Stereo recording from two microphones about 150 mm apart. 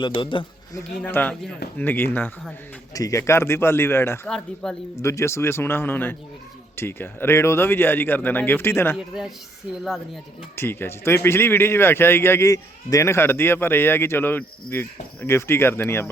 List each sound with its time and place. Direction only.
0.0 s a man's voice: 35° left (ahead or behind)
0.8 s speech: 15° left (ahead or behind)
4.3 s a woman's voice: 5° left (ahead or behind)
4.9 s speech: 20° left (ahead or behind)
9.0 s a woman's voice: 5° right (ahead or behind)
10.5 s speech: 15° left (ahead or behind)